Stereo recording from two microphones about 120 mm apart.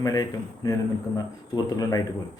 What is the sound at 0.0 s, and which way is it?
A man's voice, 30° left (ahead or behind).